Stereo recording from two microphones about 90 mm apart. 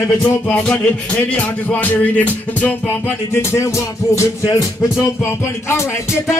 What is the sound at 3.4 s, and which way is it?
Music, 30° left (ahead or behind).